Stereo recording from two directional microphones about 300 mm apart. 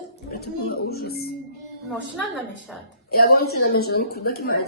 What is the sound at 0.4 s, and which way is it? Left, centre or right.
Speech, left.